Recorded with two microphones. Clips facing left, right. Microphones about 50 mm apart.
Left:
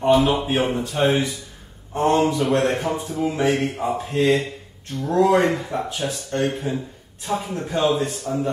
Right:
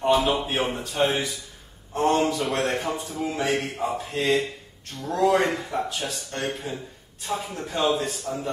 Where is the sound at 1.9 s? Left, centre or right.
Centre.